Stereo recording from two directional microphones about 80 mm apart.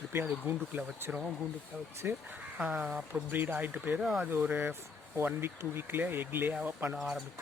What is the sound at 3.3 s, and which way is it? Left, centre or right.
Speech, right.